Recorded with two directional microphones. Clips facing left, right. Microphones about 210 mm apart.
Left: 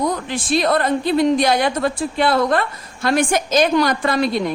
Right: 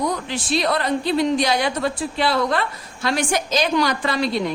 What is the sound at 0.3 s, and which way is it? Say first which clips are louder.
A woman's voice: left 3 dB; 50° left (ahead or behind).